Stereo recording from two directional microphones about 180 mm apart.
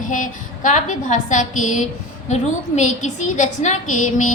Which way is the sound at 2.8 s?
40° left (ahead or behind).